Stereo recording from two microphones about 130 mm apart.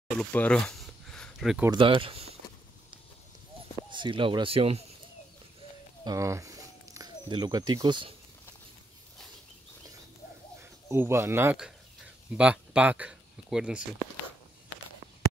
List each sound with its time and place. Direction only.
0.2 s a sound: 10° left (ahead or behind)
1.7 s speech: 40° right (ahead or behind)
3.9 s speech: 40° right (ahead or behind)
6.0 s speech: 25° right (ahead or behind)
10.6 s speech: 20° right (ahead or behind)